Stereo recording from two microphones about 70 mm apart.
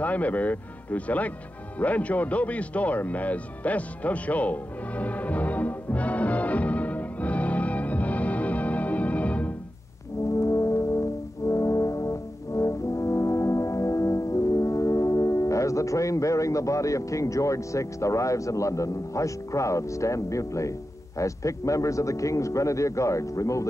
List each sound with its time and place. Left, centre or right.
0.0 s speech: left
1.8 s music: left
10.3 s brass instrument: left
21.2 s a man's voice: left